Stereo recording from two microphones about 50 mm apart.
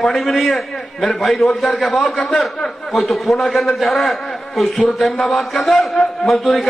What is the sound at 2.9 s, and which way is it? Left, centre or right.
A man's voice, centre.